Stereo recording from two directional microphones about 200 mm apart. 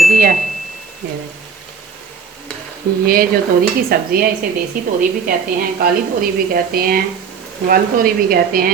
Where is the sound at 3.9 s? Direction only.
50° right (ahead or behind).